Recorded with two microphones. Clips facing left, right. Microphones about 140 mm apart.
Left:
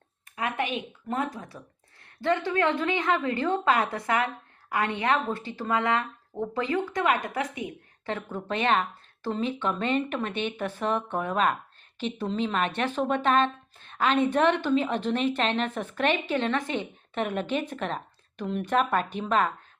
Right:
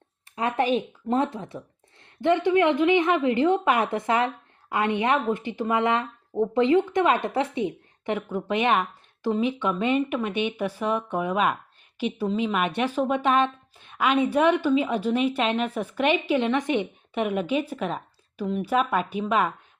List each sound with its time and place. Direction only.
0.3 s a woman's voice: 35° right (ahead or behind); by 19.5 s 10° right (ahead or behind)